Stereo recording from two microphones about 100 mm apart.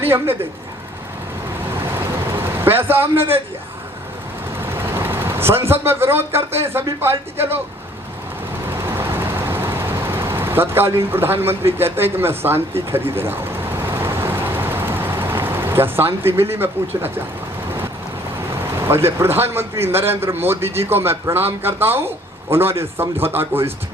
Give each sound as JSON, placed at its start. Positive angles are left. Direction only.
{"t": 0.0, "sound": "speech", "side_deg": -20}
{"t": 2.3, "sound": "speech", "side_deg": -20}
{"t": 4.6, "sound": "speech", "side_deg": -25}
{"t": 8.6, "sound": "vehicle", "side_deg": -25}
{"t": 18.8, "sound": "a man's voice", "side_deg": -25}